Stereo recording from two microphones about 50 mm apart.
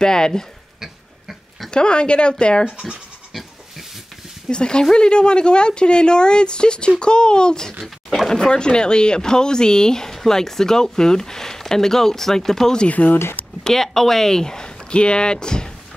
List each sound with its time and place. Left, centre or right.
0.0 s speech: centre
1.7 s a woman's voice: centre
2.6 s speech: centre
4.5 s a woman's voice: centre
7.8 s a sound: centre
8.3 s speech: centre
12.8 s speech: left
13.7 s speech: centre